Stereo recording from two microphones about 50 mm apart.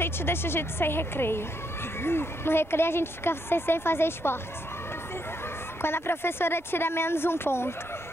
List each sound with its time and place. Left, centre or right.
0.0 s a woman's voice: left
5.8 s a woman's voice: left